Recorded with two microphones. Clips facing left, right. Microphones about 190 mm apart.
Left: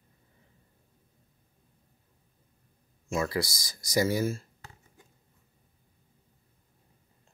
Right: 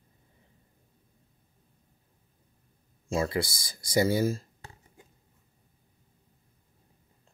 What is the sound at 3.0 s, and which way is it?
Speech, 30° right (ahead or behind).